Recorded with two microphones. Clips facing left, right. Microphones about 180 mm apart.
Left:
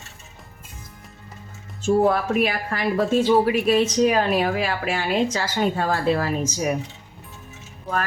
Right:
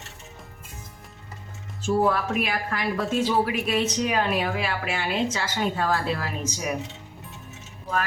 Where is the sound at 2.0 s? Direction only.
40° left (ahead or behind).